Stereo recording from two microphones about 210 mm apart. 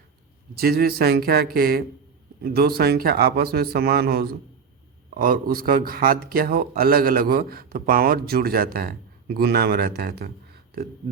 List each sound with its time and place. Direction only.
0.6 s speech: 45° right (ahead or behind)